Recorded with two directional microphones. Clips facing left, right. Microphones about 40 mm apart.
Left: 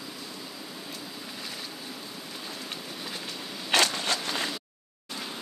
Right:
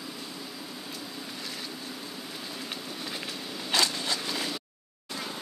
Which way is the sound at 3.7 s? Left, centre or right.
Left.